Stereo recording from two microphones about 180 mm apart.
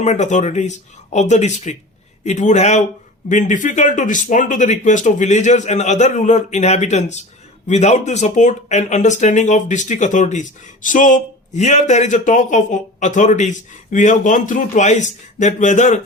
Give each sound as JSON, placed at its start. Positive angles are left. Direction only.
{"t": 0.0, "sound": "speech", "side_deg": 40}